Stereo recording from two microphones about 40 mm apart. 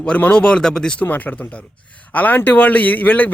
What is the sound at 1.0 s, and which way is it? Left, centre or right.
A man's voice, left.